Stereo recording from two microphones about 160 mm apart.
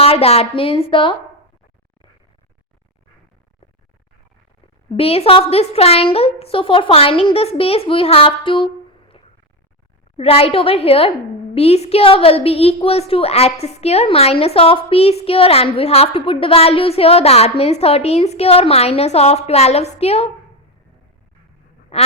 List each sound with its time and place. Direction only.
0.0 s a woman's voice: 40° left (ahead or behind)
4.9 s a woman's voice: 40° left (ahead or behind)
21.9 s quack: 40° left (ahead or behind)